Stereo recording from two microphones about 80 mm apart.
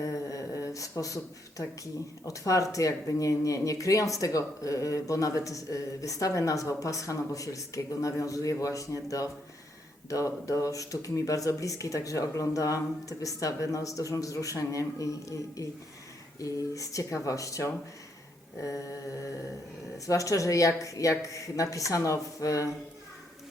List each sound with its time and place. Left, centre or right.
0.0 s speech: left
20.1 s speech: left